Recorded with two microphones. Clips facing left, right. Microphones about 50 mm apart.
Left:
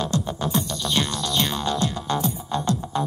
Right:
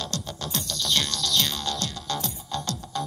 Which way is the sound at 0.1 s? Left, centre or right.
Centre.